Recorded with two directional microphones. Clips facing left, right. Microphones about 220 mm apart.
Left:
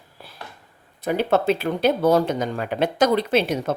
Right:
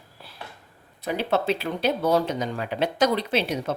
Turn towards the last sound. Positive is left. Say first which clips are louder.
# left 4 dB
turn(degrees=50)  # may be behind; listen again after turning